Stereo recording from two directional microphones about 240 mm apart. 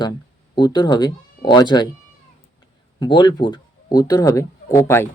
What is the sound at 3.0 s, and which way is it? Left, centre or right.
Speech, centre.